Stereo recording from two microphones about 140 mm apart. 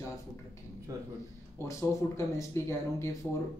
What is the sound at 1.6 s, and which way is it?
Speech, 20° left (ahead or behind).